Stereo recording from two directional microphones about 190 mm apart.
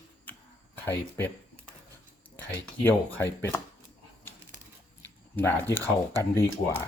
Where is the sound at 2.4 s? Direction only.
10° left (ahead or behind).